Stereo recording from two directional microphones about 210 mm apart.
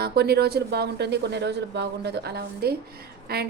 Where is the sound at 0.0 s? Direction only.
50° right (ahead or behind).